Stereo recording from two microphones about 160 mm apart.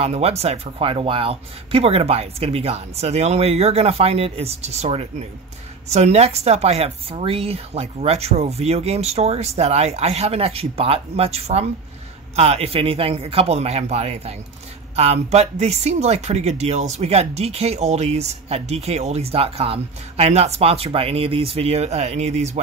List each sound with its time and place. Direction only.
0.0 s speech: 40° right (ahead or behind)